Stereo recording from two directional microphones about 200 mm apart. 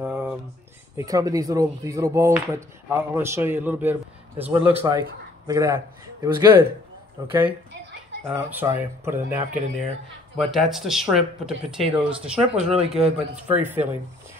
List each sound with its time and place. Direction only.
0.1 s a sound: 10° right (ahead or behind)
0.9 s speech: 15° right (ahead or behind)
8.2 s speech: 5° right (ahead or behind)
12.5 s speech: 30° right (ahead or behind)
13.5 s speech: 10° right (ahead or behind)